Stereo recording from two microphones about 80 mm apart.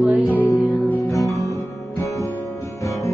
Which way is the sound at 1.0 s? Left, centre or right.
Left.